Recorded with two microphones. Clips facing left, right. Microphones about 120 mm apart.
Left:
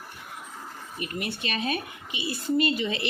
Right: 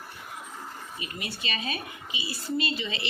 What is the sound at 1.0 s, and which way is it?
Speech, 60° left (ahead or behind).